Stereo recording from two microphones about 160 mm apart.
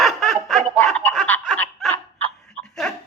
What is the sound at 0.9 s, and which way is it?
Snicker, 10° left (ahead or behind).